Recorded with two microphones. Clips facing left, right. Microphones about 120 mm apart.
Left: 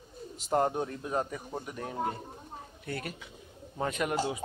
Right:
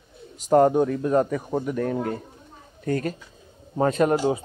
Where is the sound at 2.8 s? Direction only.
40° right (ahead or behind).